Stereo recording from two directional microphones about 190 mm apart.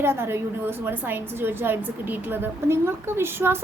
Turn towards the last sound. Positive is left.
turn(degrees=-10)  # may be behind; listen again after turning